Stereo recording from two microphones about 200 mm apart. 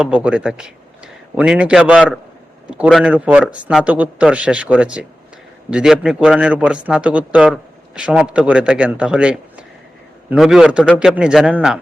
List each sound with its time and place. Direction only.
0.1 s a man's voice: 5° right (ahead or behind)